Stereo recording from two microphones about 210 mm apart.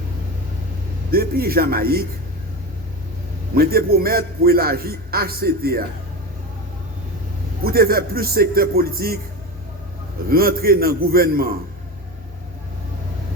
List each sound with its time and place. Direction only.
1.1 s a man's voice: 45° right (ahead or behind)
3.5 s a man's voice: 45° right (ahead or behind)
7.6 s a man's voice: 45° right (ahead or behind)
10.2 s a man's voice: 45° right (ahead or behind)